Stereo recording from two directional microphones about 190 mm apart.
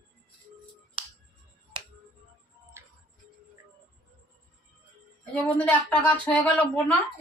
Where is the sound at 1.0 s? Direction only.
30° right (ahead or behind).